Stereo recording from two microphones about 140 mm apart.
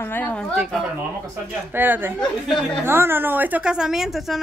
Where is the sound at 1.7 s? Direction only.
15° right (ahead or behind).